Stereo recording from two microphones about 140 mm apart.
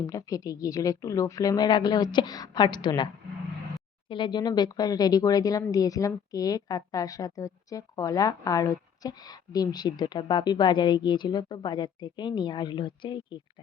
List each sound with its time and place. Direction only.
0.1 s a woman's voice: 25° left (ahead or behind)
4.1 s a woman's voice: 35° left (ahead or behind)